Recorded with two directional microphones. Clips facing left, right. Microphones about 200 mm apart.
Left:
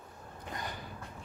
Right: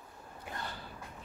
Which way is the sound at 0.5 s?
15° left (ahead or behind).